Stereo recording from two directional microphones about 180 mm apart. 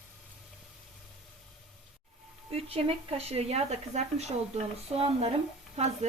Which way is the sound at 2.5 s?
30° right (ahead or behind).